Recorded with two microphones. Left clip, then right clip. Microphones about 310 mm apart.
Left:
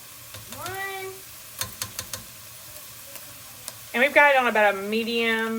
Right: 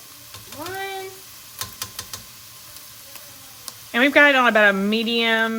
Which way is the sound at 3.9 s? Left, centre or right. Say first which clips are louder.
Right 3 dB; right.